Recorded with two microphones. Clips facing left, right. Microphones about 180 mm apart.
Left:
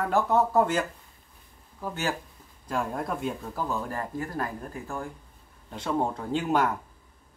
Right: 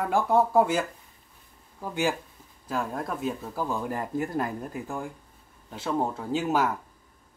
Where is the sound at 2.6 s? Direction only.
Centre (ahead or behind).